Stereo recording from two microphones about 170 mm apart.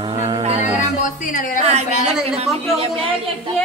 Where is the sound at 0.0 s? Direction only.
25° right (ahead or behind).